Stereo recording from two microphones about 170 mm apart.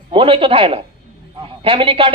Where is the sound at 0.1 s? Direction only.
30° right (ahead or behind).